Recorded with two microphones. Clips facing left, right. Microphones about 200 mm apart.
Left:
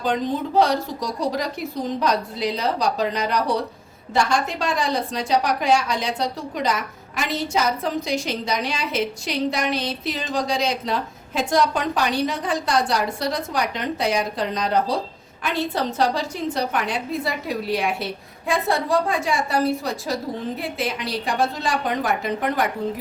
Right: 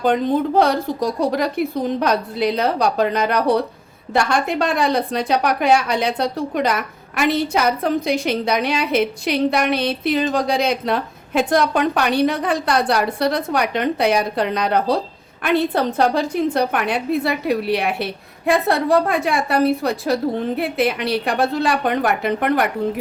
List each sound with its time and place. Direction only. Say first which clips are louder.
0.0 s a woman's voice: right 6 dB; 60° right (ahead or behind)